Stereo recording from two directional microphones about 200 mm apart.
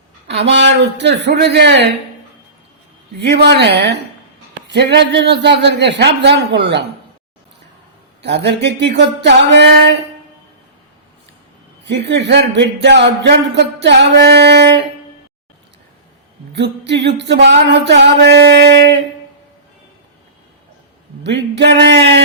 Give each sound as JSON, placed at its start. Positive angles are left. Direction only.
{"t": 0.3, "sound": "speech", "side_deg": -60}
{"t": 3.2, "sound": "speech", "side_deg": -55}
{"t": 8.2, "sound": "speech", "side_deg": -60}
{"t": 11.9, "sound": "speech", "side_deg": -60}
{"t": 16.6, "sound": "speech", "side_deg": -60}
{"t": 21.2, "sound": "speech", "side_deg": -60}